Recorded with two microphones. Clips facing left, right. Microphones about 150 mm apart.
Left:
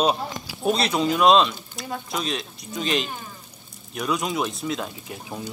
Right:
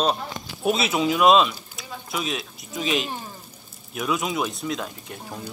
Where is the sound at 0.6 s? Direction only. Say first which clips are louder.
Even; 5° right (ahead or behind).